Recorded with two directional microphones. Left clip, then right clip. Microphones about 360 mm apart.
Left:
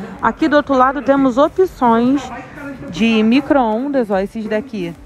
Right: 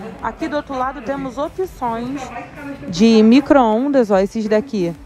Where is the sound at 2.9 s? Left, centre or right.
Centre.